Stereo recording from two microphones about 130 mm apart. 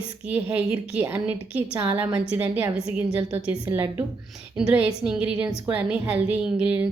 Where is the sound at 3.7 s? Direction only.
20° right (ahead or behind).